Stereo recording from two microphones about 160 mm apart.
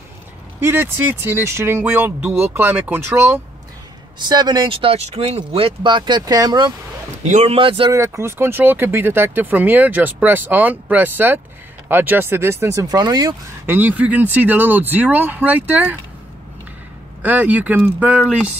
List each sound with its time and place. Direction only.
0.6 s speech: 15° right (ahead or behind)
4.2 s speech: 25° right (ahead or behind)
7.2 s speech: 50° right (ahead or behind)
7.5 s speech: 35° right (ahead or behind)
7.9 s speech: 20° right (ahead or behind)
13.7 s speech: 10° right (ahead or behind)
17.2 s speech: 10° right (ahead or behind)